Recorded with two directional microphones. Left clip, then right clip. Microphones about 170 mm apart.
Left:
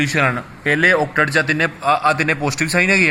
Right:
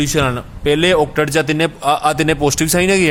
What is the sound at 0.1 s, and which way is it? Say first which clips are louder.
A man's voice: even; 90° right.